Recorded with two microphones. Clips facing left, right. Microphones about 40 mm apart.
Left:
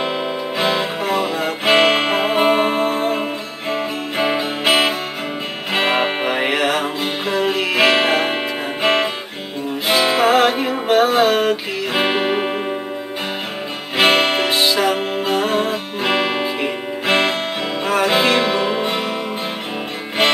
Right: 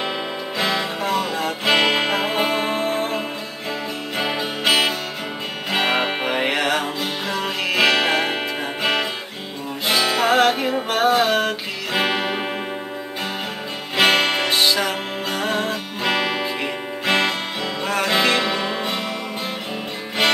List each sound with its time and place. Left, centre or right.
0.6 s music: left
2.7 s music: centre
4.2 s music: left
5.7 s music: centre
7.0 s music: centre
13.9 s music: centre